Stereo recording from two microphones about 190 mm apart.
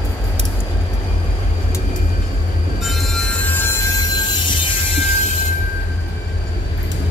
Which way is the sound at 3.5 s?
10° left (ahead or behind).